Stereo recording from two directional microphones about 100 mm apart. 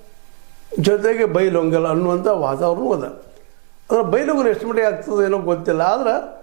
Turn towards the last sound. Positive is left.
turn(degrees=-20)  # may be behind; listen again after turning